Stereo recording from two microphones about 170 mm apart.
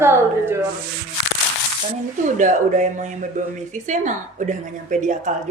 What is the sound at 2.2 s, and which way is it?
A woman's voice, 45° right (ahead or behind).